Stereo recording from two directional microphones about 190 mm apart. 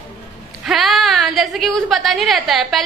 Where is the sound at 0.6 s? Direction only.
Centre (ahead or behind).